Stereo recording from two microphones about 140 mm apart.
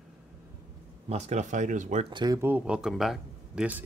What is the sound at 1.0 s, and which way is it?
Speech, 50° right (ahead or behind).